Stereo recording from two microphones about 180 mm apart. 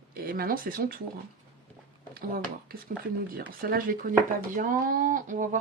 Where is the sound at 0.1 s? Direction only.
55° right (ahead or behind).